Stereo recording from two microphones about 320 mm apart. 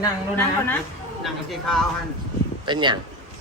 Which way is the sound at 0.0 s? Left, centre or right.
Centre.